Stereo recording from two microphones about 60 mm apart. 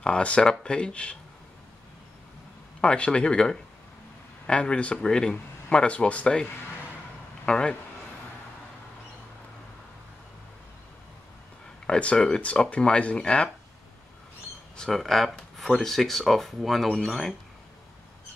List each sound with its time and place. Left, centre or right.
0.0 s speech: centre
2.8 s speech: centre
7.4 s speech: centre
11.8 s speech: centre
14.9 s speech: centre